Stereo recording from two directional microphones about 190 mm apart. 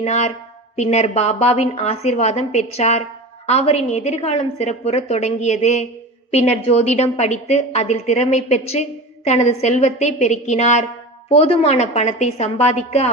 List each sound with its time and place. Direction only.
0.0 s a woman's voice: 35° left (ahead or behind)